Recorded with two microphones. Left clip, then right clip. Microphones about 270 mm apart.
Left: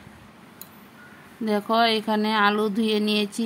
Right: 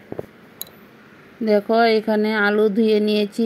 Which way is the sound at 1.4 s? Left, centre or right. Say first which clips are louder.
Right 5 dB; centre.